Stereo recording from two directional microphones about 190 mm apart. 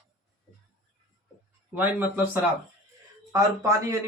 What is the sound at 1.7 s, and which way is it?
Speech, 10° right (ahead or behind).